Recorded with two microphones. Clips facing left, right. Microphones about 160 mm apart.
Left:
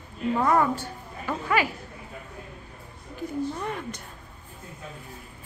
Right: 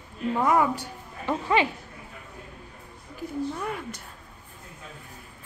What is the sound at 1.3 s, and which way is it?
Speech, 25° right (ahead or behind).